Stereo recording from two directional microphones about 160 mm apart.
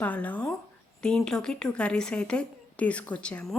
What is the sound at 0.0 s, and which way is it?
A woman's voice, 10° left (ahead or behind).